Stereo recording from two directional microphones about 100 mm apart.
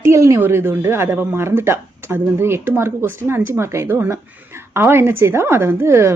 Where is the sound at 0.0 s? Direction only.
30° right (ahead or behind).